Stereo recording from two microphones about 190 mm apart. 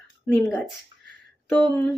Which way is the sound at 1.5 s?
10° left (ahead or behind).